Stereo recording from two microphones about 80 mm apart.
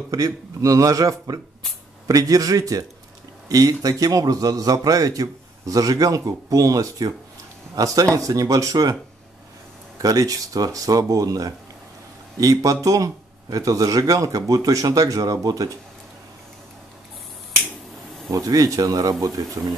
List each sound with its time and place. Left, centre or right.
0.1 s a man's voice: right
10.0 s a man's voice: right
18.3 s a man's voice: right